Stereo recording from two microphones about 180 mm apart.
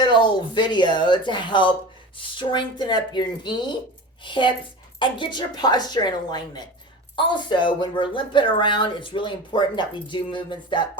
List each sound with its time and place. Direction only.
0.0 s speech: 25° left (ahead or behind)